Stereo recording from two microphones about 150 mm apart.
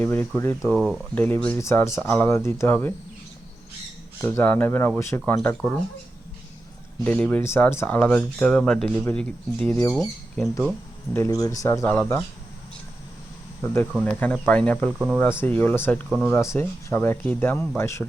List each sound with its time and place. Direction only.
0.0 s speech: 15° left (ahead or behind)
0.6 s speech: 5° right (ahead or behind)
1.1 s speech: 10° left (ahead or behind)
4.2 s speech: 10° left (ahead or behind)
7.0 s speech: 10° left (ahead or behind)
11.1 s speech: 20° left (ahead or behind)
14.0 s speech: 10° left (ahead or behind)
14.8 s speech: 10° right (ahead or behind)
15.2 s speech: 15° left (ahead or behind)